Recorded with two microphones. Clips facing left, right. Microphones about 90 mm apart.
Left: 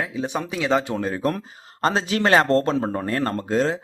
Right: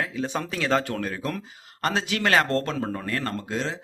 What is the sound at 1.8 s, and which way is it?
Speech, 30° left (ahead or behind).